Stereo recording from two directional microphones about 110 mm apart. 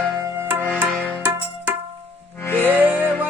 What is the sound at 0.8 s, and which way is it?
Music, 20° right (ahead or behind).